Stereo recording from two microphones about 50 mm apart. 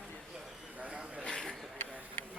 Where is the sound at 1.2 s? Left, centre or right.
Centre.